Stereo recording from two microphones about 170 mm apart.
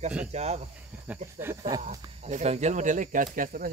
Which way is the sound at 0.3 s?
40° right (ahead or behind).